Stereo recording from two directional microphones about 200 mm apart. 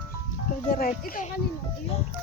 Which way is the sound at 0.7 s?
40° left (ahead or behind).